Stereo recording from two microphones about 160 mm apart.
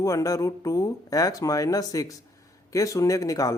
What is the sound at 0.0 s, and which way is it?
Speech, 20° left (ahead or behind).